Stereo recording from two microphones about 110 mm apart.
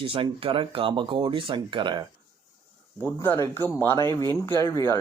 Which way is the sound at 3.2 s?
20° left (ahead or behind).